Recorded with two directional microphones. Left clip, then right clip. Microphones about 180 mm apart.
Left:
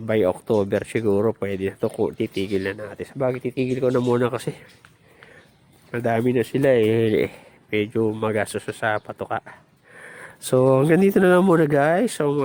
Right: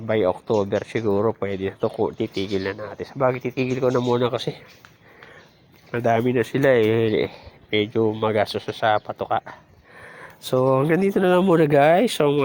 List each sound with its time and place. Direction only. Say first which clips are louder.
0.1 s speech: even; 35° left (ahead or behind)
5.9 s speech: right 1 dB; 20° left (ahead or behind)
7.7 s speech: right 1 dB; 20° left (ahead or behind)